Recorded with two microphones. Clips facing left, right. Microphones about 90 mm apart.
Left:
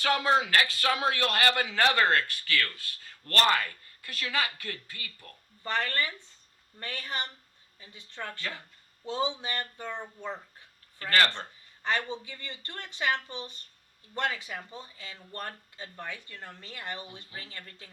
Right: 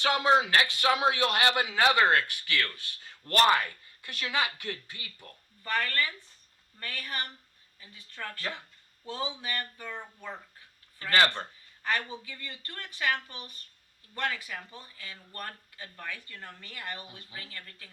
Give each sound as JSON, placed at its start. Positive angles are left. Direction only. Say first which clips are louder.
{"t": 0.0, "sound": "a man's voice", "louder": "right 1 dB", "side_deg": -20}
{"t": 5.6, "sound": "speech", "louder": "even", "side_deg": 25}
{"t": 8.4, "sound": "a man's voice", "louder": "right 1 dB", "side_deg": -20}
{"t": 9.0, "sound": "speech", "louder": "left 4 dB", "side_deg": 25}
{"t": 11.1, "sound": "speech", "louder": "right 1 dB", "side_deg": -15}
{"t": 11.8, "sound": "speech", "louder": "left 1 dB", "side_deg": 25}